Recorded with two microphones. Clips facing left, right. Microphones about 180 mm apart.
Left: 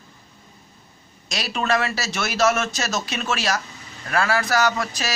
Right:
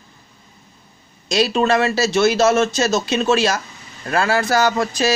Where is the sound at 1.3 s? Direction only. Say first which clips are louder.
Right 7 dB; 30° right (ahead or behind).